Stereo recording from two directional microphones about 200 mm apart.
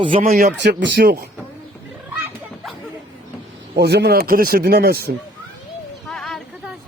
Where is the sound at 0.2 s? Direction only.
45° right (ahead or behind).